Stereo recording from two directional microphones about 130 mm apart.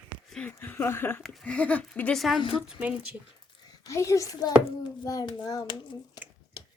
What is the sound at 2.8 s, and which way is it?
Speech, 10° right (ahead or behind).